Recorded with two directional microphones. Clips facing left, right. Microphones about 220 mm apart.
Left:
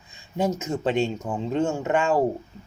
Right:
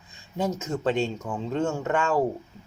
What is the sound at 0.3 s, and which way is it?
Speech, 20° left (ahead or behind).